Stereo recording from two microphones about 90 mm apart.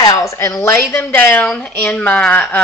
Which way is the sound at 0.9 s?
20° left (ahead or behind).